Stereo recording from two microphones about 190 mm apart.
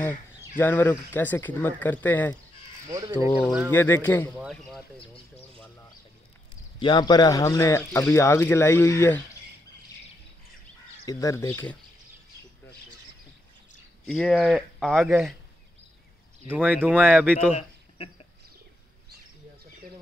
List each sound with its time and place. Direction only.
0.6 s speech: 10° left (ahead or behind)
2.9 s speech: 20° right (ahead or behind)
3.3 s speech: 5° right (ahead or behind)
3.7 s speech: 10° left (ahead or behind)
4.4 s a man's voice: centre (ahead or behind)
6.8 s speech: 25° left (ahead or behind)
11.1 s speech: 15° left (ahead or behind)
14.0 s a man's voice: centre (ahead or behind)
16.4 s speech: 10° right (ahead or behind)
17.6 s a sound: 30° left (ahead or behind)